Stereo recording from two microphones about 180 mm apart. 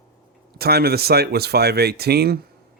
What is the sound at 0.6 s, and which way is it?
Speech, 60° right (ahead or behind).